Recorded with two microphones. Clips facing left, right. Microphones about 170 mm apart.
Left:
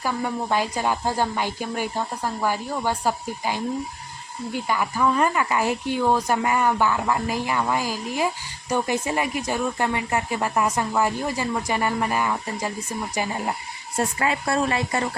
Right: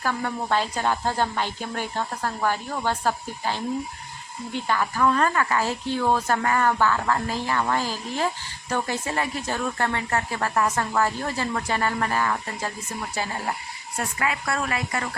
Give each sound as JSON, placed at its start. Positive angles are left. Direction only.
{"t": 0.0, "sound": "speech", "side_deg": 10}
{"t": 13.9, "sound": "speech", "side_deg": 30}